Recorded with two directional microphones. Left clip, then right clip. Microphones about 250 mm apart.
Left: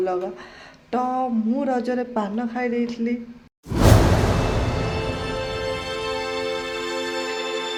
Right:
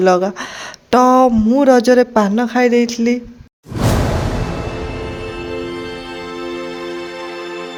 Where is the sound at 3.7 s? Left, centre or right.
Centre.